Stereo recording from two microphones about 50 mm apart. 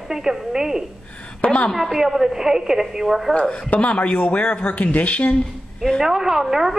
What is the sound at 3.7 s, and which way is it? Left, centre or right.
Speech, left.